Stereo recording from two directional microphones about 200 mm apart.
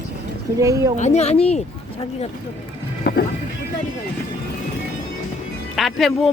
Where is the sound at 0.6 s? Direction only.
15° right (ahead or behind).